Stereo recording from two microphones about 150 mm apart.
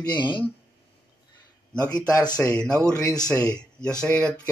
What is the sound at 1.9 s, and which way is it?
Speech, 25° left (ahead or behind).